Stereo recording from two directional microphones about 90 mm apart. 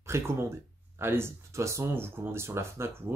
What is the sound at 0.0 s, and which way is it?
Speech, 30° right (ahead or behind).